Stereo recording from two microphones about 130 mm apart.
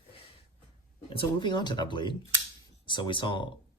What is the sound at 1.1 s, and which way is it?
Speech, 35° left (ahead or behind).